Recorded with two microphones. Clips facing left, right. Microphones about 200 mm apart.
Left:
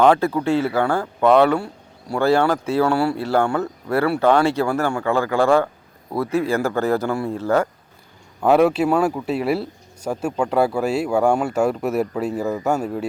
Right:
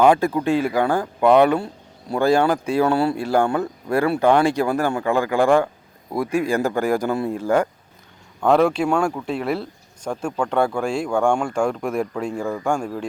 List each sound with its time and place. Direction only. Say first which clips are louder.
0.0 s speech: even; 15° right (ahead or behind)
8.4 s speech: left 1 dB; 5° left (ahead or behind)